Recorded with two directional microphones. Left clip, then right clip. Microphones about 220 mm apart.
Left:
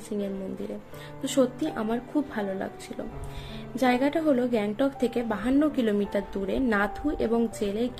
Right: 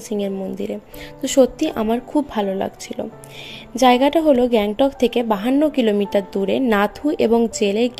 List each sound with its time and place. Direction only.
1.2 s a woman's voice: 30° right (ahead or behind)